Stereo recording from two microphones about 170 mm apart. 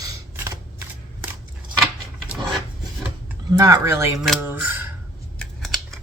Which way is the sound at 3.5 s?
20° right (ahead or behind).